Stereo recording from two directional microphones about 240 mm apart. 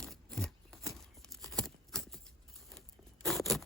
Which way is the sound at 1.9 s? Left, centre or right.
Centre.